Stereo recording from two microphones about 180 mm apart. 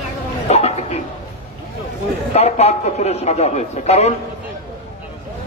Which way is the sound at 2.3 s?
35° left (ahead or behind).